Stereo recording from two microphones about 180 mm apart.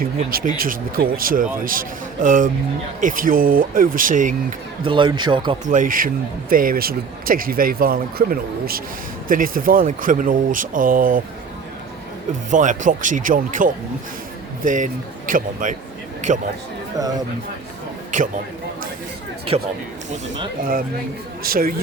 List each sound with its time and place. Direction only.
0.0 s speech: 55° right (ahead or behind)
4.9 s speech: 25° right (ahead or behind)
5.6 s speech: 45° right (ahead or behind)
12.5 s speech: 45° right (ahead or behind)
18.1 s a man's voice: 45° right (ahead or behind)
20.6 s speech: 50° right (ahead or behind)